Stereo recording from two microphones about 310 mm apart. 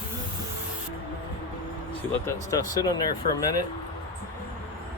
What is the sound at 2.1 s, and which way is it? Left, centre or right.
Speech, centre.